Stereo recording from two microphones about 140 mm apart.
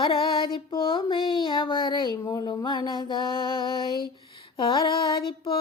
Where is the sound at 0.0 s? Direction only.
35° left (ahead or behind).